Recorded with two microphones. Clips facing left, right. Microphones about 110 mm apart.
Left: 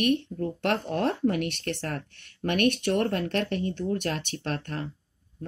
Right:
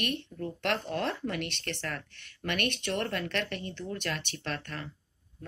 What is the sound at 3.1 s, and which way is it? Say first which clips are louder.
Speech: left 6 dB; 40° left (ahead or behind).